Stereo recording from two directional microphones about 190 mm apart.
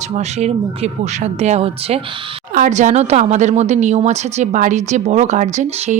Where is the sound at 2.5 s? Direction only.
45° right (ahead or behind).